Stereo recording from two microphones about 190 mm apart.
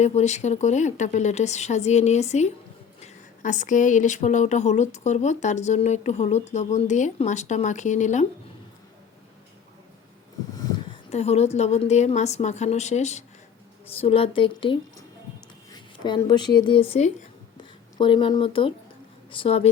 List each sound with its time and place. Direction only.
0.0 s speech: 35° left (ahead or behind)
10.5 s a sound: 20° left (ahead or behind)
11.1 s a woman's voice: 35° left (ahead or behind)